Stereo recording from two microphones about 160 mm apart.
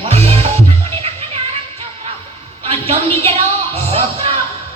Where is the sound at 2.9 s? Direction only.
40° right (ahead or behind).